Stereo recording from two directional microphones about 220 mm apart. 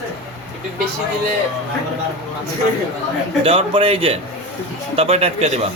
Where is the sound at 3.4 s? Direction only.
25° right (ahead or behind).